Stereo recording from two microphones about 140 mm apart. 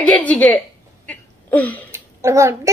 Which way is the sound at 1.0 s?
10° left (ahead or behind).